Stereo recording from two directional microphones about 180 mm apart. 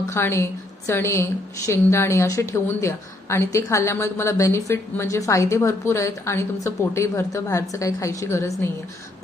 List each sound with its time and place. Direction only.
0.1 s a woman's voice: 15° left (ahead or behind)